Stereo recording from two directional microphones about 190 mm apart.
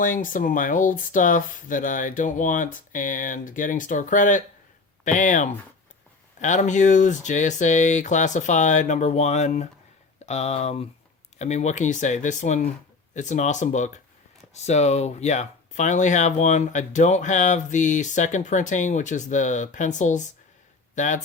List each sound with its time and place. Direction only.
0.0 s speech: 45° left (ahead or behind)